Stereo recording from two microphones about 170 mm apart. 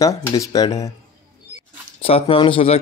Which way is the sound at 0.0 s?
20° left (ahead or behind).